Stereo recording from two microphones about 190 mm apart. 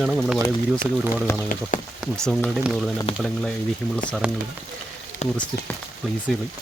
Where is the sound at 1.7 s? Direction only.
45° left (ahead or behind).